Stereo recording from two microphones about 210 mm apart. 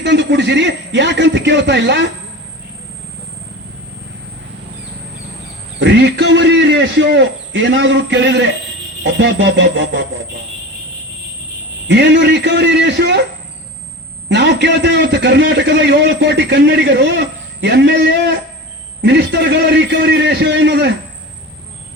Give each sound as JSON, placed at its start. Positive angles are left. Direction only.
{"t": 0.0, "sound": "a man's voice", "side_deg": -55}
{"t": 5.8, "sound": "a sound", "side_deg": -55}
{"t": 9.0, "sound": "a man's voice", "side_deg": -60}
{"t": 11.9, "sound": "a man's voice", "side_deg": -55}
{"t": 14.3, "sound": "a man's voice", "side_deg": -55}